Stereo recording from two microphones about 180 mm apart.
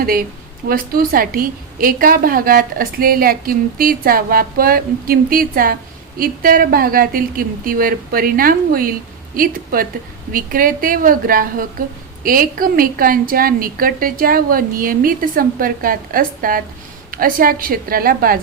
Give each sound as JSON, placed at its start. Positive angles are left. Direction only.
{"t": 0.0, "sound": "a woman's voice", "side_deg": -55}